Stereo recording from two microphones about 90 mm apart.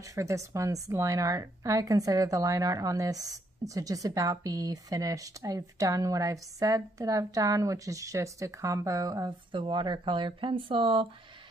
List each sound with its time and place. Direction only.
0.1 s a woman's voice: 35° right (ahead or behind)
9.5 s speech: 60° right (ahead or behind); by 11.1 s 75° right (ahead or behind)